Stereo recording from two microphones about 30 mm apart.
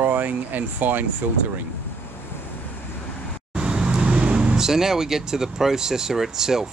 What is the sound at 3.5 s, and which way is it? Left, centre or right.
Vehicle, right.